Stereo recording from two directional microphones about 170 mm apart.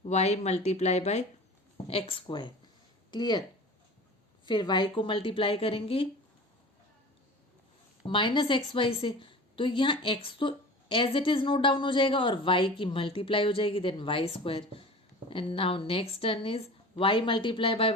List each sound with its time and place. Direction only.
0.0 s a woman's voice: 40° left (ahead or behind); by 3.4 s 25° left (ahead or behind)
4.4 s a woman's voice: 25° left (ahead or behind)
8.0 s a woman's voice: 30° left (ahead or behind)